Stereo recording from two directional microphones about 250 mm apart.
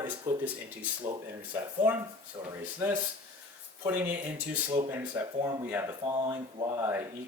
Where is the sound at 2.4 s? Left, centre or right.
Right.